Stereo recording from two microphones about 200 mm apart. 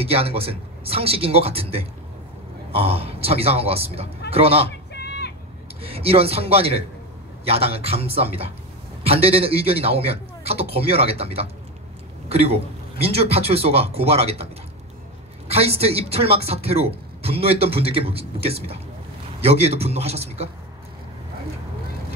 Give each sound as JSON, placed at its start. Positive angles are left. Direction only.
{"t": 0.0, "sound": "a man's voice", "side_deg": -30}
{"t": 4.6, "sound": "a sound", "side_deg": 55}
{"t": 5.8, "sound": "a man's voice", "side_deg": -30}